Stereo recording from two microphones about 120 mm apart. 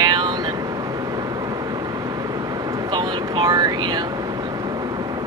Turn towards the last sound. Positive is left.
turn(degrees=-35)  # may be behind; listen again after turning